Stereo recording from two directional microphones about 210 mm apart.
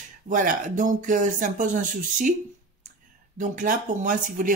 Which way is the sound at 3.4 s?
40° right (ahead or behind).